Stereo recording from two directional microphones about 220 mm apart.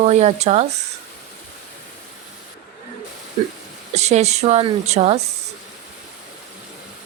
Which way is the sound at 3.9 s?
30° right (ahead or behind).